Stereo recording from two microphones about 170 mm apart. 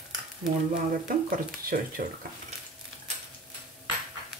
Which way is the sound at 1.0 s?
55° right (ahead or behind).